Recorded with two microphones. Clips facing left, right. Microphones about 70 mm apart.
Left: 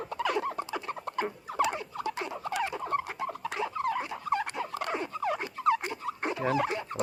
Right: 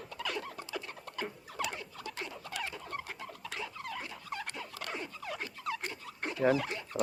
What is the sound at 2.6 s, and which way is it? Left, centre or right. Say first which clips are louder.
Bird: left 10 dB; left.